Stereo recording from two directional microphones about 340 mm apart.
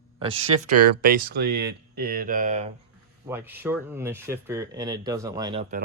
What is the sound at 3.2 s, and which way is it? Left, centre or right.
Speech, centre.